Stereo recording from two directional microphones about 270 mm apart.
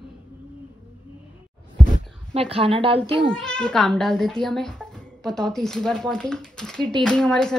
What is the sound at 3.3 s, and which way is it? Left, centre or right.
Speech, centre.